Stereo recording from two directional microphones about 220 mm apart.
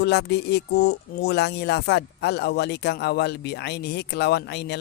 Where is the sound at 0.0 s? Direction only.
50° left (ahead or behind).